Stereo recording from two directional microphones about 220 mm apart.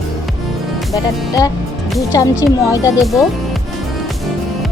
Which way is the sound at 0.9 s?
15° left (ahead or behind).